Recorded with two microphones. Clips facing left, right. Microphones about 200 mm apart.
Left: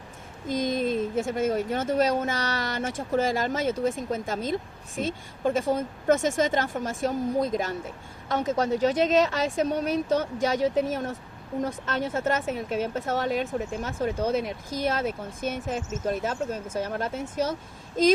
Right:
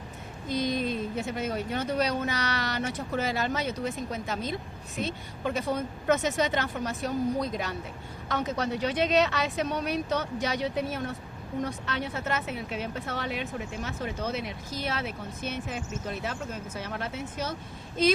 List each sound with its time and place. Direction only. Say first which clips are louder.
0.4 s speech: left 3 dB; 45° left (ahead or behind)